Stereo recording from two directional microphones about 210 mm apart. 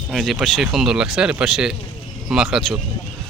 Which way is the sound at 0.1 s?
Centre (ahead or behind).